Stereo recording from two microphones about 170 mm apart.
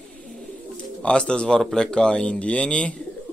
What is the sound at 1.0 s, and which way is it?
Speech, 5° left (ahead or behind).